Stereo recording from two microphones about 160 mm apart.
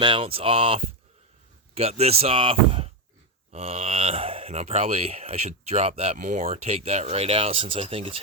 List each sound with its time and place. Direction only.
0.0 s speech: 35° right (ahead or behind)
6.1 s speech: 50° right (ahead or behind); by 8.2 s 35° right (ahead or behind)